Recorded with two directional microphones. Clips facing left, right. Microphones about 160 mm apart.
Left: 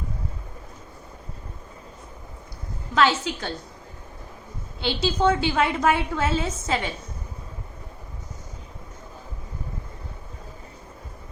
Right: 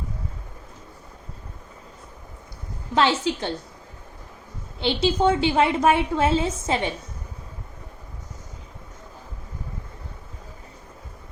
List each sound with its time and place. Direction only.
2.9 s a woman's voice: 25° right (ahead or behind)
4.8 s a woman's voice: 25° right (ahead or behind)